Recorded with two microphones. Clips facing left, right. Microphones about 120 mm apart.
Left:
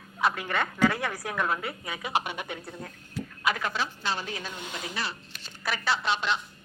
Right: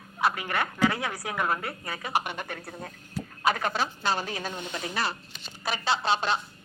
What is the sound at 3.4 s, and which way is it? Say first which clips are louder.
A woman's voice: right 3 dB; 35° right (ahead or behind).